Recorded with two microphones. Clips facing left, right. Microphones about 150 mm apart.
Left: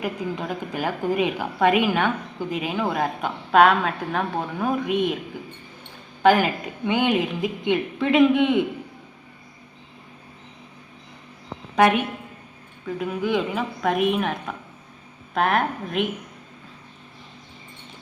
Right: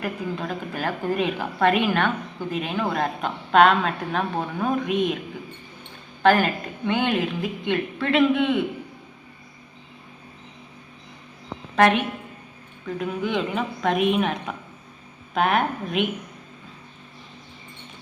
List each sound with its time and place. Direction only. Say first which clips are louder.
0.0 s a woman's voice: left 1 dB; 15° left (ahead or behind)
6.2 s a woman's voice: left 1 dB; 10° left (ahead or behind)
11.8 s a woman's voice: even; 10° left (ahead or behind)